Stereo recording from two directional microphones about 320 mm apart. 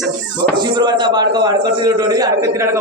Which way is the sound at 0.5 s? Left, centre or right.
Centre.